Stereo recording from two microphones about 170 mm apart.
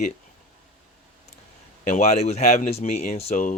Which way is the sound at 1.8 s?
45° left (ahead or behind).